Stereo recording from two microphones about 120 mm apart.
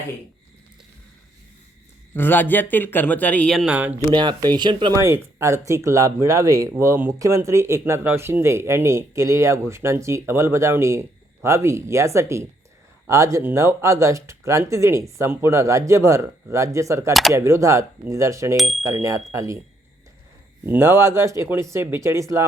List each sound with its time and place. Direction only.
2.1 s speech: 15° left (ahead or behind)
3.7 s speech: 10° right (ahead or behind)
4.1 s speech: 40° right (ahead or behind)
4.9 s speech: 25° right (ahead or behind)
18.5 s speech: centre (ahead or behind)
19.3 s speech: 25° right (ahead or behind)
20.7 s speech: 20° right (ahead or behind)